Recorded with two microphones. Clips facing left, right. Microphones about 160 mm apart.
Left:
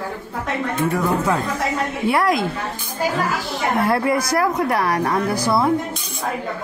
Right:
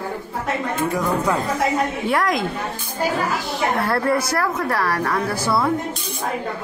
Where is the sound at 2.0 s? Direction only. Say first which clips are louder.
Left 5 dB; 5° left (ahead or behind).